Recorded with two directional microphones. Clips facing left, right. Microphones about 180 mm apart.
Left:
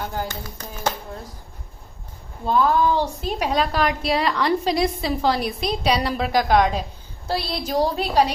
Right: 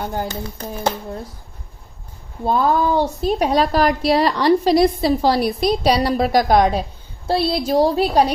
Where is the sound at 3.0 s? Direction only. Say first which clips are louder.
Right 6 dB; 35° right (ahead or behind).